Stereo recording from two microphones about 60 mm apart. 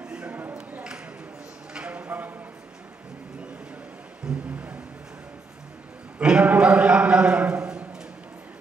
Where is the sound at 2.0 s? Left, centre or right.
Right.